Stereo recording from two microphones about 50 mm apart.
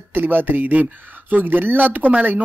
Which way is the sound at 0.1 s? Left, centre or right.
Right.